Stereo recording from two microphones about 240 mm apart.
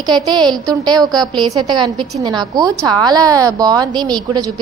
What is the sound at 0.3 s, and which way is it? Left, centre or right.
A woman's voice, centre.